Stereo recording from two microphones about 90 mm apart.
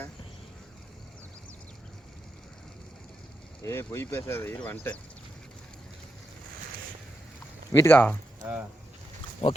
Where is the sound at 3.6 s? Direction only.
30° left (ahead or behind).